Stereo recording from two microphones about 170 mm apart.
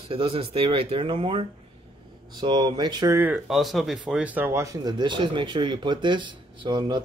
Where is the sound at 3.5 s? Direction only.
Centre (ahead or behind).